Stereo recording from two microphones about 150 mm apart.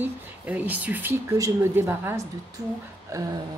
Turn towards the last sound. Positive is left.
turn(degrees=-20)  # may be behind; listen again after turning